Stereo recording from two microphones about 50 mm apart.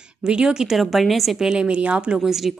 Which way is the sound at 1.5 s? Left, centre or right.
Right.